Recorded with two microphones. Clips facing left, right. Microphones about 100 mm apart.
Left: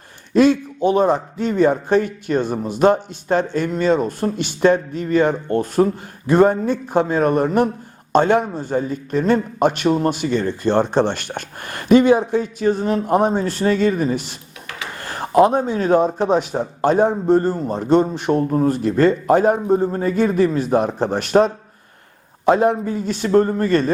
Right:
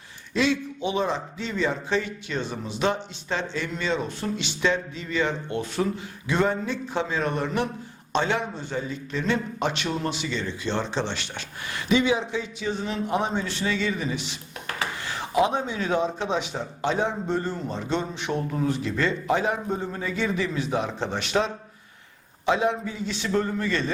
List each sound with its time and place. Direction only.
0.3 s a man's voice: 45° left (ahead or behind)